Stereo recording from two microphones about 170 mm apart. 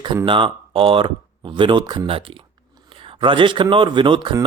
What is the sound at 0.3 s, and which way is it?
Speech, 30° right (ahead or behind).